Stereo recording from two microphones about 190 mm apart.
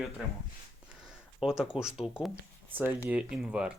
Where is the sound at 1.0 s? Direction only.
5° right (ahead or behind).